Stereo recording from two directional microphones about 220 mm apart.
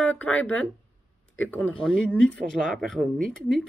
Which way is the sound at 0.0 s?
5° left (ahead or behind).